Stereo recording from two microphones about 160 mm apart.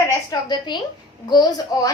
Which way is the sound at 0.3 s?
25° left (ahead or behind).